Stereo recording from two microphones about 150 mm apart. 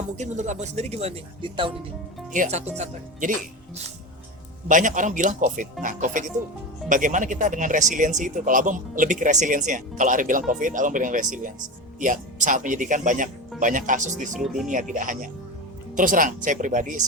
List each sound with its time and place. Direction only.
0.2 s speech: 50° right (ahead or behind); by 1.7 s 35° right (ahead or behind)
2.3 s speech: 55° right (ahead or behind)
4.7 s speech: 60° right (ahead or behind)
14.3 s speech: centre (ahead or behind)
14.7 s speech: 60° right (ahead or behind)